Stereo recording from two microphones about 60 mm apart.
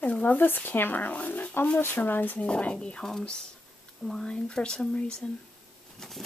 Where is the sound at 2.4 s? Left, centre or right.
Centre.